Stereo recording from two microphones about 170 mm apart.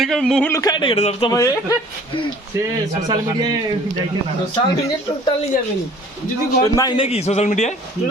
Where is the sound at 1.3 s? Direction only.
20° left (ahead or behind).